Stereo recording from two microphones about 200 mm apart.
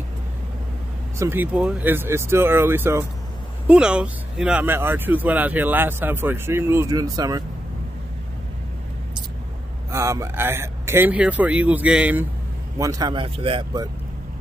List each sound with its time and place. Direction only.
1.1 s speech: 10° right (ahead or behind)
9.8 s speech: 15° right (ahead or behind)